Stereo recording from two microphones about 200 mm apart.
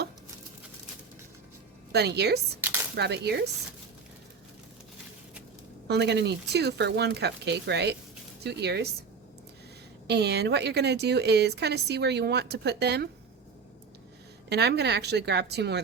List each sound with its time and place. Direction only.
1.9 s a woman's voice: 55° right (ahead or behind)
5.9 s a woman's voice: 55° right (ahead or behind)
10.1 s a woman's voice: 55° right (ahead or behind)
14.5 s a woman's voice: 55° right (ahead or behind)